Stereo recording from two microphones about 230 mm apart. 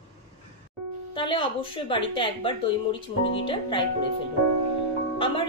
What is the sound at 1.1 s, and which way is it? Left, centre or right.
A woman's voice, left.